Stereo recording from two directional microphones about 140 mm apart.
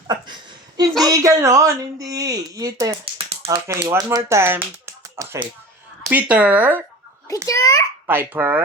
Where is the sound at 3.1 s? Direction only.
45° right (ahead or behind).